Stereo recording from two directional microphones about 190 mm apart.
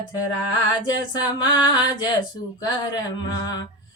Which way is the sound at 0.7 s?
25° left (ahead or behind).